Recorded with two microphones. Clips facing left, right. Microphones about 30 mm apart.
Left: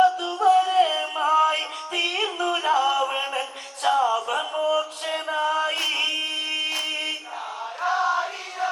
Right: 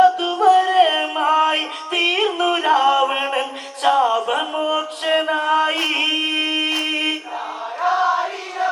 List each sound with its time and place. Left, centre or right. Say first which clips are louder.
0.2 s music: right 5 dB; right
3.8 s a sound: right 5 dB; right
4.7 s mantra: right 6 dB; right
5.3 s chant: right 6 dB; right
5.9 s a sound: right 6 dB; right
6.8 s mantra: right 7 dB; right
7.8 s choir: right 5 dB; right